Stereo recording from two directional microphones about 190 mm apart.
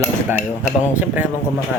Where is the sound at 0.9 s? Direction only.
10° right (ahead or behind).